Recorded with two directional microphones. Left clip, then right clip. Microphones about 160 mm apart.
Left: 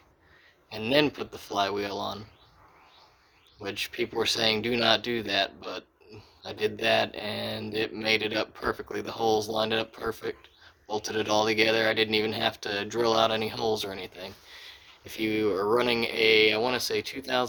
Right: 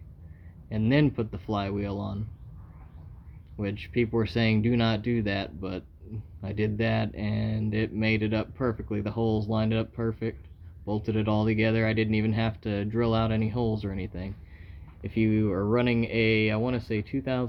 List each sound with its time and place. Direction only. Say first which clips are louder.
0.7 s speech: left 2 dB; 20° left (ahead or behind)
3.6 s speech: right 2 dB; 20° left (ahead or behind)